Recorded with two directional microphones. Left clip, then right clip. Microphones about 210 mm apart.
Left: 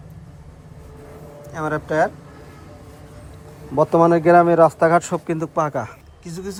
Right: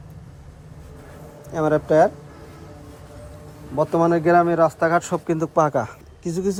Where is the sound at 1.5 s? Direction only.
30° right (ahead or behind).